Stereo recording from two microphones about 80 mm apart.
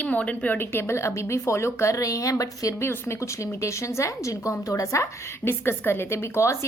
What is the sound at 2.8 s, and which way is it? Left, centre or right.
A woman's voice, left.